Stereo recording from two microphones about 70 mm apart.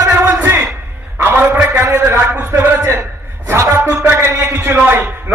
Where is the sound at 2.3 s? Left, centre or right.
Right.